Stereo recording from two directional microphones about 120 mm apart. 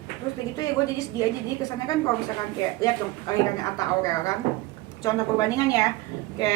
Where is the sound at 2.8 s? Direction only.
30° left (ahead or behind).